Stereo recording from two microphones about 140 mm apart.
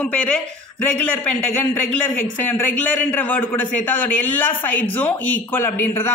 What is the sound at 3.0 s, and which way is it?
Speech, 10° left (ahead or behind).